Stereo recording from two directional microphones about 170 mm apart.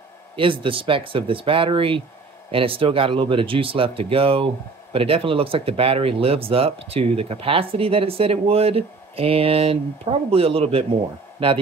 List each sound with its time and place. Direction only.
0.4 s speech: 30° right (ahead or behind)